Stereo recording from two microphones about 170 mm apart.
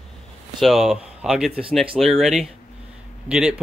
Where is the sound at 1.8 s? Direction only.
Centre (ahead or behind).